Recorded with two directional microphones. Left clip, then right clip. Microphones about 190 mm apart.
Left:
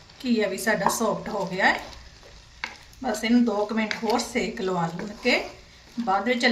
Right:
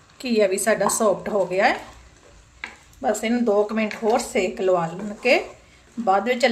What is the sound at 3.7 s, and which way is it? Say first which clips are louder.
Speech: right 4 dB; 40° right (ahead or behind).